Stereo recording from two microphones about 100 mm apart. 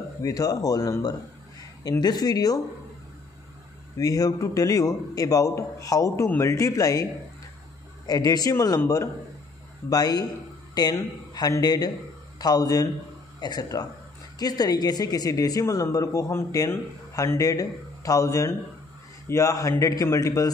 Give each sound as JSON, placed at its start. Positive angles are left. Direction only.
{"t": 0.2, "sound": "a woman's voice", "side_deg": 35}
{"t": 1.9, "sound": "a woman's voice", "side_deg": 40}
{"t": 4.0, "sound": "a woman's voice", "side_deg": 35}
{"t": 8.1, "sound": "a woman's voice", "side_deg": 40}